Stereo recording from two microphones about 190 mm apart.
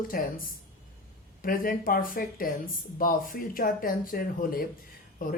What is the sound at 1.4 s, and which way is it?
Speech, 50° left (ahead or behind).